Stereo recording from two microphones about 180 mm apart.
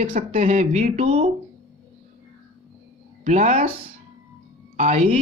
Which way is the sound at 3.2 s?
40° right (ahead or behind).